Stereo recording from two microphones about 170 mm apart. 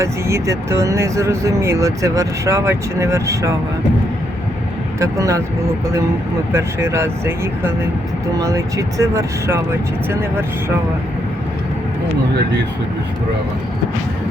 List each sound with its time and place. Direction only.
0.0 s speech: 15° right (ahead or behind)
4.9 s speech: 20° right (ahead or behind)
6.5 s speech: 15° right (ahead or behind)